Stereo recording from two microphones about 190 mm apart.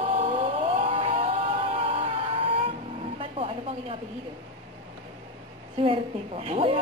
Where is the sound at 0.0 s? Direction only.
30° right (ahead or behind).